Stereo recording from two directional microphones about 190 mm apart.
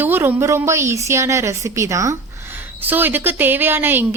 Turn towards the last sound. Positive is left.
turn(degrees=-10)  # may be behind; listen again after turning